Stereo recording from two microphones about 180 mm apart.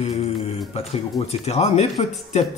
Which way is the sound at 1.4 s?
35° left (ahead or behind).